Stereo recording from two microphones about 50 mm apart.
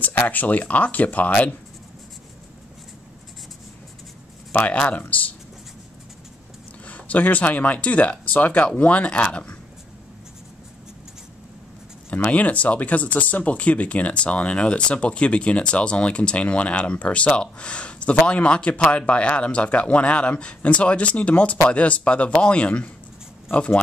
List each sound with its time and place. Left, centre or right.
0.0 s speech: left
4.5 s speech: left
6.9 s speech: left
12.1 s speech: left